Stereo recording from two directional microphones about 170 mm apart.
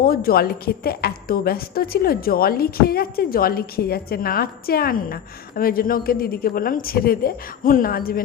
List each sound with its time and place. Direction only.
0.0 s a woman's voice: 60° left (ahead or behind)